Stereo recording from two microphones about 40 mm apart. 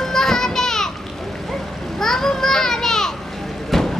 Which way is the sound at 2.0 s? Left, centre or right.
Centre.